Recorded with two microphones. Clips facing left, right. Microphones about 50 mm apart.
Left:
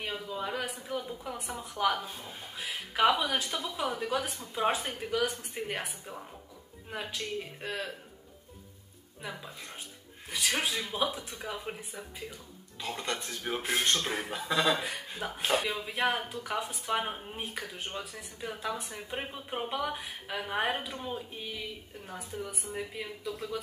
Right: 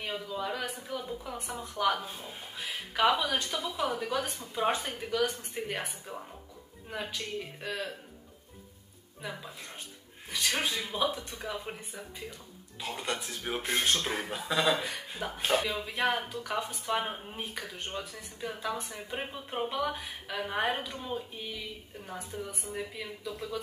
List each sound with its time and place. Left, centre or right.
0.3 s speech: centre
2.0 s a woman's voice: centre
10.3 s a woman's voice: centre
12.8 s a woman's voice: centre
15.5 s speech: left
15.8 s a woman's voice: centre
22.0 s a woman's voice: centre